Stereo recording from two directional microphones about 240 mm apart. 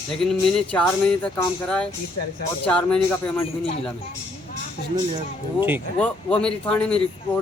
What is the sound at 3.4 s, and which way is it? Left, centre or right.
Speech, left.